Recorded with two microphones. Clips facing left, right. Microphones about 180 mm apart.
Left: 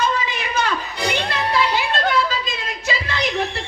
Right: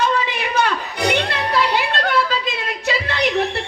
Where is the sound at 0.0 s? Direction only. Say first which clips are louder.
Right 2 dB; 65° right (ahead or behind).